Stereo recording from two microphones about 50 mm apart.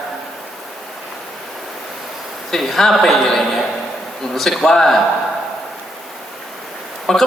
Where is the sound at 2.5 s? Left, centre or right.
Centre.